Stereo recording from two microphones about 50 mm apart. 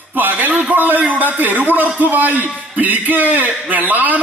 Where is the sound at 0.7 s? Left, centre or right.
Right.